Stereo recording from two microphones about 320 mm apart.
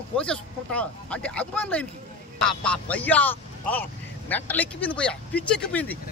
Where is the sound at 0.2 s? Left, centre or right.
Centre.